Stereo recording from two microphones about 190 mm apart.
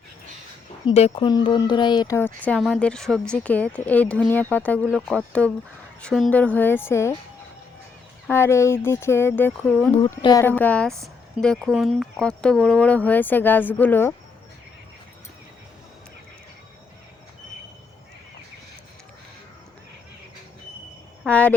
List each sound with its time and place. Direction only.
0.9 s speech: 30° left (ahead or behind); by 7.2 s 15° left (ahead or behind)
8.3 s speech: 15° left (ahead or behind)
21.2 s speech: 5° left (ahead or behind)